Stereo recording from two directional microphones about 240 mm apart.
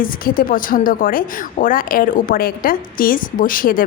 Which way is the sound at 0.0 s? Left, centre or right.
Left.